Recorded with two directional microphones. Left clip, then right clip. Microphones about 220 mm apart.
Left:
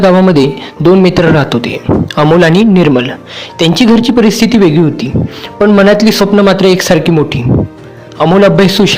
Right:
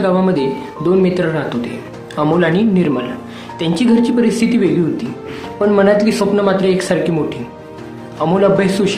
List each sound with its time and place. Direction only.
0.0 s speech: 40° left (ahead or behind)